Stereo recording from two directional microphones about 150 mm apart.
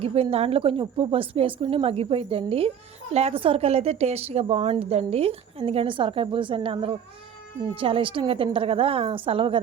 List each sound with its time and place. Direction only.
0.0 s a woman's voice: 40° right (ahead or behind)